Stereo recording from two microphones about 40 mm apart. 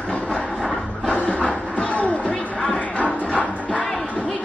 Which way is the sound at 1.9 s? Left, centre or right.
Left.